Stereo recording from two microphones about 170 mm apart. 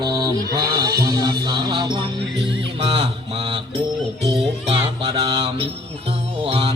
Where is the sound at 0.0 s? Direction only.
25° right (ahead or behind).